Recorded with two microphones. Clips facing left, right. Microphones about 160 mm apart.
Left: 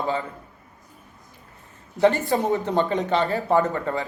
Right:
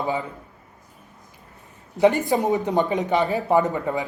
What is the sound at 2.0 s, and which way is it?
Speech, 15° right (ahead or behind).